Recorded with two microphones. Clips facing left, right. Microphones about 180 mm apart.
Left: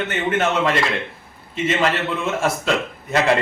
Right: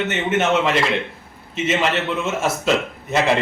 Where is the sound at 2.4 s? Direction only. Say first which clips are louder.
Even; 5° right (ahead or behind).